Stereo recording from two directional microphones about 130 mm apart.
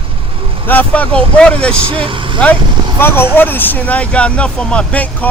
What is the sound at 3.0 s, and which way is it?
Speech, 15° left (ahead or behind).